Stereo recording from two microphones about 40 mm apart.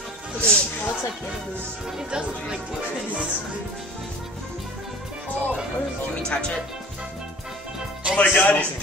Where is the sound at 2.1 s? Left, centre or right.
Right.